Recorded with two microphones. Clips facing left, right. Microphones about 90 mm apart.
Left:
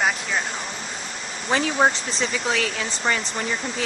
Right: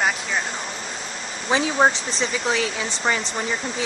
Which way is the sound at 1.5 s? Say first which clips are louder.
Right 1 dB; 10° right (ahead or behind).